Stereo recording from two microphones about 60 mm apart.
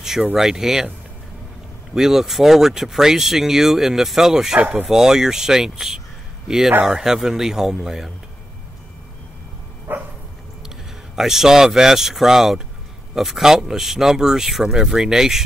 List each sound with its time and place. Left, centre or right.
0.3 s speech: centre
2.0 s speech: centre
4.6 s speech: right
4.8 s speech: centre
9.9 s dog: right
11.1 s speech: centre